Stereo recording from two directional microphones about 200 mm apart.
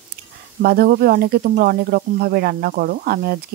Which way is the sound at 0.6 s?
50° right (ahead or behind).